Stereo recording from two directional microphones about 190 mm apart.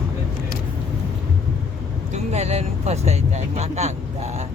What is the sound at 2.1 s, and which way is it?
Speech, 35° right (ahead or behind).